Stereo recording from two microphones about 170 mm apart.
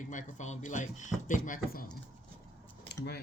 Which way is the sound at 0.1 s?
45° left (ahead or behind).